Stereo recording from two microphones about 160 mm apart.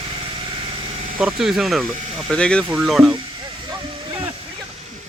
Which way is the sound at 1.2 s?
5° right (ahead or behind).